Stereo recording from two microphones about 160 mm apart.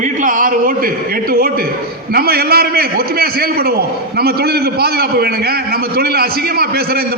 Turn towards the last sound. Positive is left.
turn(degrees=-75)  # may be behind; listen again after turning